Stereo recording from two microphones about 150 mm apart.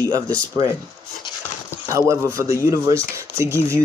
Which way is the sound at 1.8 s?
20° right (ahead or behind).